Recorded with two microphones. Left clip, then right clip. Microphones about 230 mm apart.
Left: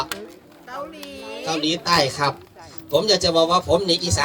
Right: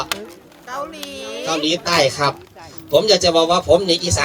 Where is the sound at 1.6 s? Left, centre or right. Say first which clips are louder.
Right 3 dB; centre.